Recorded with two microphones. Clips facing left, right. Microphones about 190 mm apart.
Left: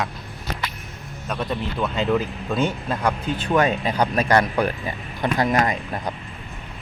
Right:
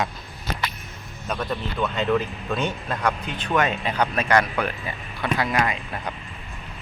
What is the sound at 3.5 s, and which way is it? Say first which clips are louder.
Speech: left 2 dB; 35° left (ahead or behind).